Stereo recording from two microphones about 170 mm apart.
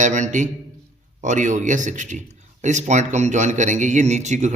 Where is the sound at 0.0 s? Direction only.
45° right (ahead or behind).